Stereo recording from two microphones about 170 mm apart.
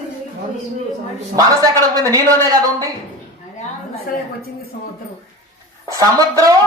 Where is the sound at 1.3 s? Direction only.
20° right (ahead or behind).